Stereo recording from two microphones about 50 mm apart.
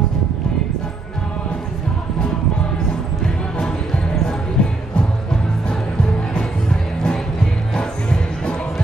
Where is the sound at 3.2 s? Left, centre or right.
Centre.